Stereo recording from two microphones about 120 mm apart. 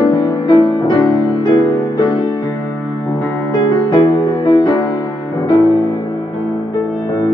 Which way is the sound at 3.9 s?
40° left (ahead or behind).